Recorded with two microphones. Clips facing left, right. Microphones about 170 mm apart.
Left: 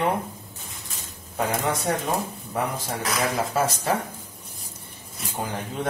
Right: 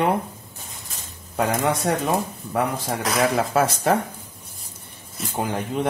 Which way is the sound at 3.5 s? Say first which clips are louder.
Right 4 dB; 65° right (ahead or behind).